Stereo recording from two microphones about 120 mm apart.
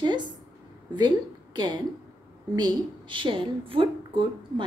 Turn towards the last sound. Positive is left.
turn(degrees=-45)  # may be behind; listen again after turning